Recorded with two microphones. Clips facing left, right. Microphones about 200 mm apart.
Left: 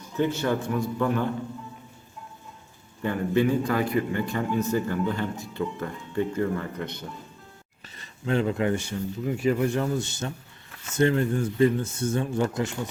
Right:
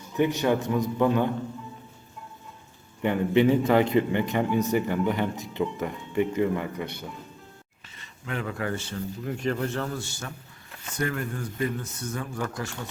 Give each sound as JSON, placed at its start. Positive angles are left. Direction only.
{"t": 0.2, "sound": "a man's voice", "side_deg": -15}
{"t": 3.0, "sound": "a man's voice", "side_deg": -20}
{"t": 7.9, "sound": "speech", "side_deg": 35}